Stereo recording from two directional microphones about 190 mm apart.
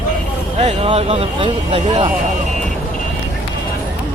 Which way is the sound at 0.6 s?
30° right (ahead or behind).